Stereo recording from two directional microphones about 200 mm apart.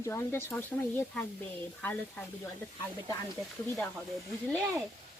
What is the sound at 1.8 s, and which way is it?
Speech, 10° left (ahead or behind).